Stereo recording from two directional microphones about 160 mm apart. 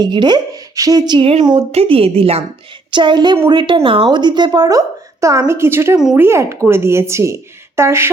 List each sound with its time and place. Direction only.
0.0 s a woman's voice: 25° right (ahead or behind)